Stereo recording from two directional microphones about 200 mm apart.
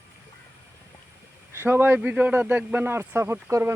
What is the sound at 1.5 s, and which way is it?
Speech, 10° right (ahead or behind).